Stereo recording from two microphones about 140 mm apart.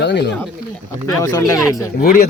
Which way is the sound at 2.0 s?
90° left.